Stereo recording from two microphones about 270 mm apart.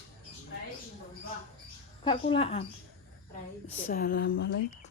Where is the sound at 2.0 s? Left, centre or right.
Centre.